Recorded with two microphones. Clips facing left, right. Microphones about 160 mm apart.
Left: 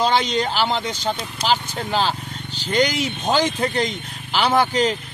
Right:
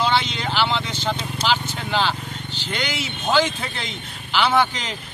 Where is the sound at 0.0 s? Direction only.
40° left (ahead or behind).